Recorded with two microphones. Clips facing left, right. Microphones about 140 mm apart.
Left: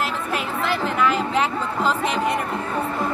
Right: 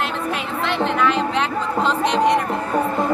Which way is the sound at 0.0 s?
Centre (ahead or behind).